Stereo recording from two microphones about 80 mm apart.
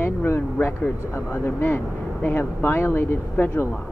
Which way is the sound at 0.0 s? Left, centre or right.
Left.